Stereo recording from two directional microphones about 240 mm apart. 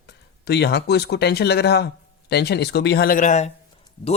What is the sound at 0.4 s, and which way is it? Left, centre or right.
Speech, left.